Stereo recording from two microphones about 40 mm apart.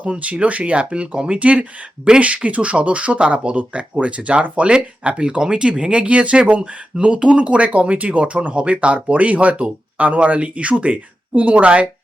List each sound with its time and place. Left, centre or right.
0.0 s speech: right
1.0 s speech: right
1.3 s speech: right
3.5 s speech: right
3.8 s speech: right